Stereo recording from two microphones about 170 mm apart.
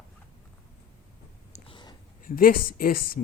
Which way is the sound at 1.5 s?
30° left (ahead or behind).